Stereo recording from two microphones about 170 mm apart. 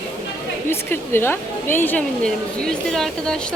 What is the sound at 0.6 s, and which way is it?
Speech, 15° left (ahead or behind).